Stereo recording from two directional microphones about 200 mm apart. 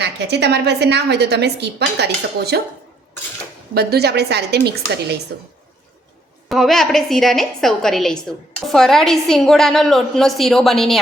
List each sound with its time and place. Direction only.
0.0 s a woman's voice: 55° right (ahead or behind)
3.8 s a woman's voice: 55° right (ahead or behind)
6.5 s a woman's voice: centre (ahead or behind)